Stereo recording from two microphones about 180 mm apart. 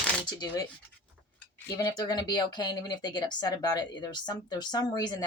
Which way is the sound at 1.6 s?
20° left (ahead or behind).